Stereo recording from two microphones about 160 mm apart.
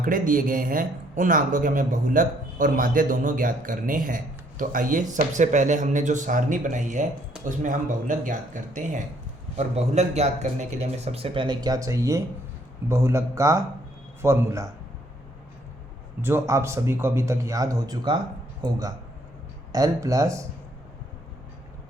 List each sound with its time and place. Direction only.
0.0 s a man's voice: 60° right (ahead or behind); by 14.7 s 20° right (ahead or behind)
16.2 s a man's voice: 15° right (ahead or behind)